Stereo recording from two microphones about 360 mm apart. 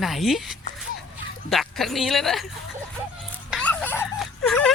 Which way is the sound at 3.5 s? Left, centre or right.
Centre.